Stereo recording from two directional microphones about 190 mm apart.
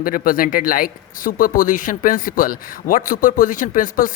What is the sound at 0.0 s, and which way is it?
A man's voice, 45° left (ahead or behind).